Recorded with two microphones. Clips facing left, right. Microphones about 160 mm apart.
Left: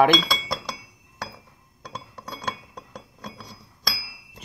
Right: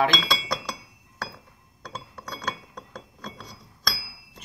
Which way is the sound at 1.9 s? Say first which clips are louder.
Left 1 dB; centre (ahead or behind).